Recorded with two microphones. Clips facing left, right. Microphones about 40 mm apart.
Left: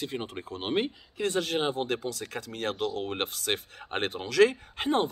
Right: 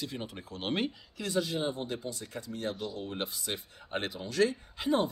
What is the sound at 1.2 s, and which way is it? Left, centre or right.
Speech, left.